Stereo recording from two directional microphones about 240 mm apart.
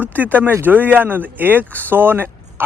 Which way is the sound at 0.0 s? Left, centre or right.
Centre.